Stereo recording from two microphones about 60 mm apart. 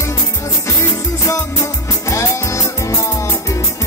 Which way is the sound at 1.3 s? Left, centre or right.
Left.